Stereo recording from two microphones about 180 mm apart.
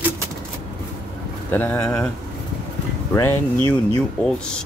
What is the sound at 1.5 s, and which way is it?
Speech, 10° left (ahead or behind).